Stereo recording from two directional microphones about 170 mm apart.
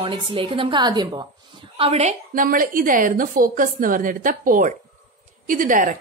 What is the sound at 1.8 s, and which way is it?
A woman's voice, 40° right (ahead or behind).